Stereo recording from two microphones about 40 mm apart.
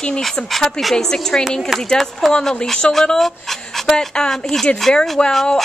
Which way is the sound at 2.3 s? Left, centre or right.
Centre.